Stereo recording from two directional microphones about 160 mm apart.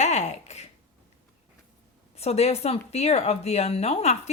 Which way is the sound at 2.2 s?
40° left (ahead or behind).